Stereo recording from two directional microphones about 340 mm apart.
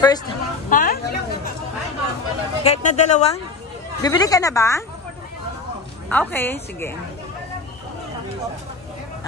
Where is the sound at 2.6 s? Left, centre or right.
Centre.